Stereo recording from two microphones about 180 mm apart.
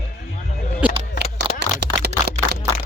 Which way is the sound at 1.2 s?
70° right (ahead or behind).